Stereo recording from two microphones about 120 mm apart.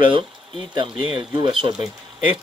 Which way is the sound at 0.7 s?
45° right (ahead or behind).